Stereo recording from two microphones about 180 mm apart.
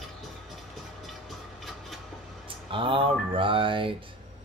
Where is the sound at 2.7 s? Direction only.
30° right (ahead or behind).